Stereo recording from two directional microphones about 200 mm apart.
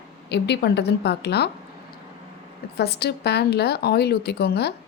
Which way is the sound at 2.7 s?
55° left (ahead or behind).